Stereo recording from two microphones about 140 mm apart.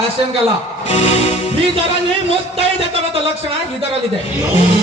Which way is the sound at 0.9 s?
45° left (ahead or behind).